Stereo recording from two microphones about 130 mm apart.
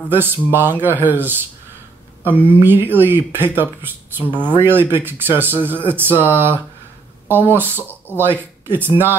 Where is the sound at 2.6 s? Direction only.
15° right (ahead or behind).